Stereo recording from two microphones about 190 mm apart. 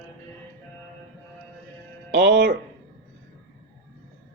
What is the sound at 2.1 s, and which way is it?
Speech, 70° right (ahead or behind).